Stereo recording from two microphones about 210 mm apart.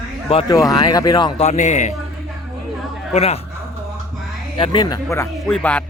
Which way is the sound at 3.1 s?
30° left (ahead or behind).